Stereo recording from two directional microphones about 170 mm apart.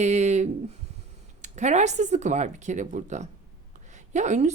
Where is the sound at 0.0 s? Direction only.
45° right (ahead or behind).